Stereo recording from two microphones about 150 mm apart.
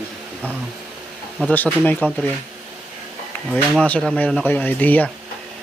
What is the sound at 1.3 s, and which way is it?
Speech, 10° left (ahead or behind).